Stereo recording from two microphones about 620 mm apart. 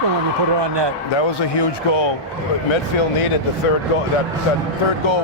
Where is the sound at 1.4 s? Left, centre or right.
Left.